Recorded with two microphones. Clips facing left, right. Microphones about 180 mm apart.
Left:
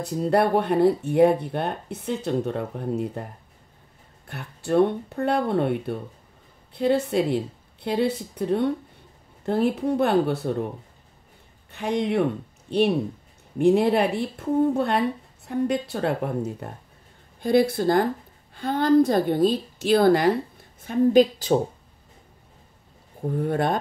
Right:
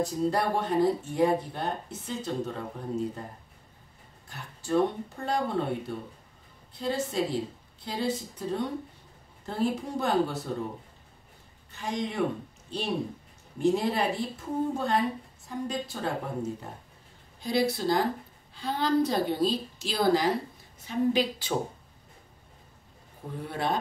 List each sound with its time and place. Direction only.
0.0 s speech: 60° left (ahead or behind)
4.3 s speech: 65° left (ahead or behind)
11.7 s speech: 65° left (ahead or behind)
17.4 s a woman's voice: 55° left (ahead or behind)
20.8 s a woman's voice: 50° left (ahead or behind)
23.3 s a woman's voice: 50° left (ahead or behind)